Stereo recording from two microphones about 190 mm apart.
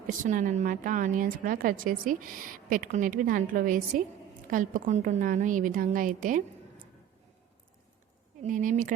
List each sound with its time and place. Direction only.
0.1 s speech: 45° right (ahead or behind)
8.4 s speech: 45° right (ahead or behind)